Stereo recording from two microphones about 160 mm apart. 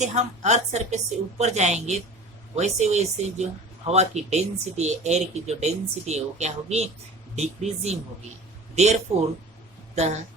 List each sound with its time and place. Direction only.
0.0 s a woman's voice: 45° right (ahead or behind)